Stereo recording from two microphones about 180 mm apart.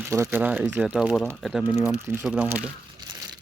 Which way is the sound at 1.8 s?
10° right (ahead or behind).